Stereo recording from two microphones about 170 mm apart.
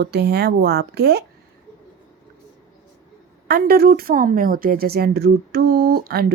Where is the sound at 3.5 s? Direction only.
65° right (ahead or behind).